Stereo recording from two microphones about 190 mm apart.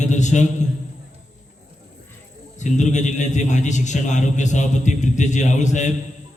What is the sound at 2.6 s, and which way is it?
A man's voice, 40° left (ahead or behind).